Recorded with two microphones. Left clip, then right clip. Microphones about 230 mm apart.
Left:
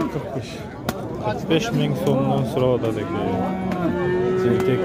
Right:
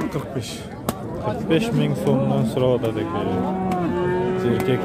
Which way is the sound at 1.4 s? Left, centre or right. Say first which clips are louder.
Right 1 dB; centre.